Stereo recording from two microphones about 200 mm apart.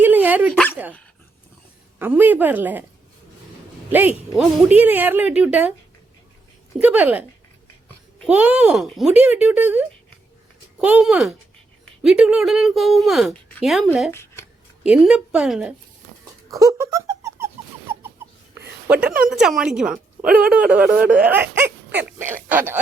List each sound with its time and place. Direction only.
0.0 s dog: 10° right (ahead or behind)
2.0 s speech: 10° right (ahead or behind)
4.4 s speech: 5° right (ahead or behind)
6.7 s speech: 10° right (ahead or behind)
8.3 s speech: 5° right (ahead or behind)
14.1 s speech: 15° left (ahead or behind)
14.8 s speech: 5° right (ahead or behind)
16.5 s a sound: 15° right (ahead or behind)
18.9 s a woman's voice: 5° right (ahead or behind)